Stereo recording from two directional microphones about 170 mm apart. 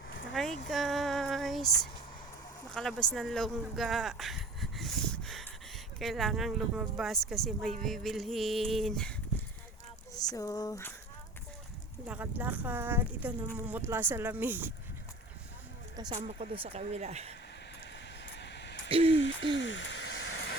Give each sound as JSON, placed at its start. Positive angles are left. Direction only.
{"t": 0.1, "sound": "a sound", "side_deg": 90}
{"t": 0.7, "sound": "female singing", "side_deg": 0}
{"t": 2.7, "sound": "speech", "side_deg": 5}
{"t": 10.2, "sound": "speech", "side_deg": 20}
{"t": 12.0, "sound": "speech", "side_deg": -10}
{"t": 16.0, "sound": "speech", "side_deg": -25}
{"t": 16.4, "sound": "speech", "side_deg": -35}
{"t": 18.3, "sound": "a sound", "side_deg": 90}
{"t": 18.9, "sound": "speech", "side_deg": -35}
{"t": 19.1, "sound": "speech", "side_deg": 90}
{"t": 19.5, "sound": "a sound", "side_deg": 90}